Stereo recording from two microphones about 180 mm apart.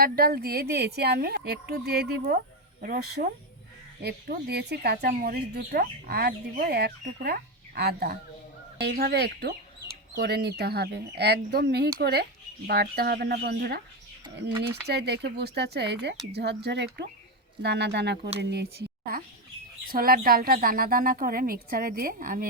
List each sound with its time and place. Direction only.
0.0 s speech: 60° right (ahead or behind)
2.8 s a woman's voice: 55° right (ahead or behind)
8.8 s a woman's voice: 65° right (ahead or behind)